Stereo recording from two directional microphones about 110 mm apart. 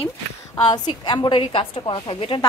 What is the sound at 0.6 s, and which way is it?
A woman's voice, 40° left (ahead or behind).